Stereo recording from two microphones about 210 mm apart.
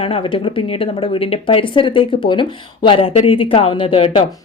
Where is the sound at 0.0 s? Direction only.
25° left (ahead or behind).